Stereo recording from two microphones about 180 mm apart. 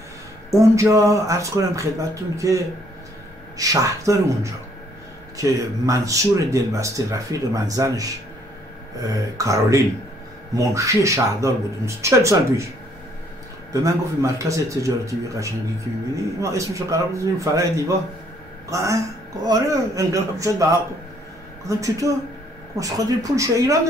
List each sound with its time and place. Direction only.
0.5 s speech: 15° right (ahead or behind)
13.7 s speech: 15° right (ahead or behind)
21.6 s speech: 20° right (ahead or behind)